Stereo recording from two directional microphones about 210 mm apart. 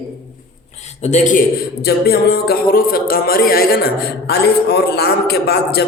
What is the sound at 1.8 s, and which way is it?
A man's voice, 50° left (ahead or behind).